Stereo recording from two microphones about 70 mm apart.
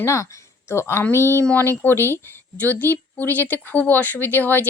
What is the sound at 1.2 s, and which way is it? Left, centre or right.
Speech, right.